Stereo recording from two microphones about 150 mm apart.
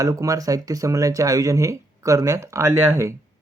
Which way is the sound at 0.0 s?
20° right (ahead or behind).